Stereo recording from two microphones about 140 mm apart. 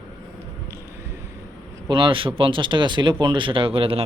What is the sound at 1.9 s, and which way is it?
Speech, 35° right (ahead or behind).